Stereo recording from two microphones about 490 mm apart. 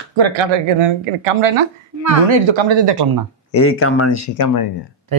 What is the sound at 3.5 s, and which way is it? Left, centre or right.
Speech, left.